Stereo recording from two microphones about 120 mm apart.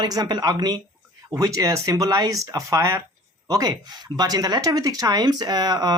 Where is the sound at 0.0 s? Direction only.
35° right (ahead or behind).